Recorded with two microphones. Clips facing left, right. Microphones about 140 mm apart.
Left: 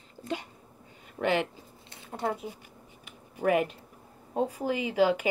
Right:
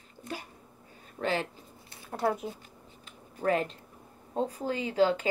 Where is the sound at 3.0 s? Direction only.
15° left (ahead or behind).